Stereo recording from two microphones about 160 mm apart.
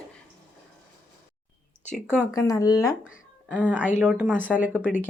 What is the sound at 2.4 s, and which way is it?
Speech, 20° left (ahead or behind).